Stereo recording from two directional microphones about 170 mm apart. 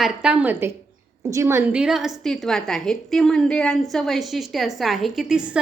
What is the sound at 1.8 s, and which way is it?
A woman's voice, 5° right (ahead or behind).